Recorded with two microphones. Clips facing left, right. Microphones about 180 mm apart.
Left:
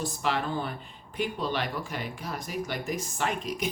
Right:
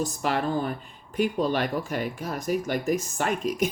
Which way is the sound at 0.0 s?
45° right (ahead or behind).